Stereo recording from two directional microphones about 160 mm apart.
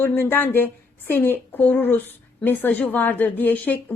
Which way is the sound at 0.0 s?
10° left (ahead or behind).